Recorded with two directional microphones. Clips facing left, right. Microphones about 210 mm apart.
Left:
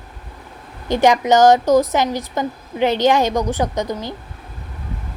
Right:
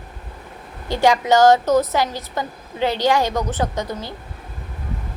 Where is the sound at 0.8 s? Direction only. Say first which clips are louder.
Left 2 dB; 20° left (ahead or behind).